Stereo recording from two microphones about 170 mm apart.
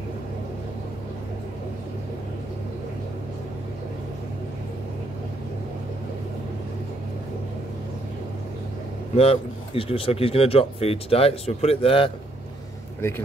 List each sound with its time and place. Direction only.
9.1 s speech: 35° left (ahead or behind)